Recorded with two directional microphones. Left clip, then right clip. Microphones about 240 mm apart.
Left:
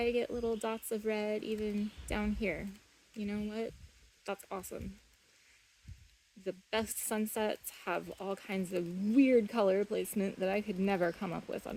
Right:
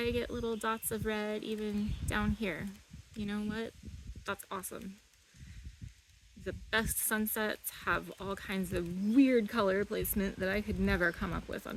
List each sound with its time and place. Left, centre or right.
0.0 s speech: centre
6.4 s speech: centre